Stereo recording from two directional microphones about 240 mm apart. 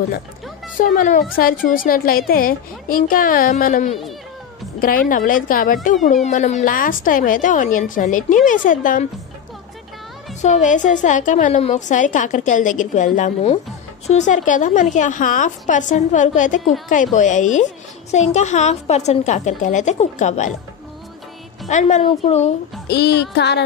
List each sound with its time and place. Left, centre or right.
0.7 s a woman's voice: left
10.4 s a woman's voice: left
21.6 s a woman's voice: left
22.8 s music: left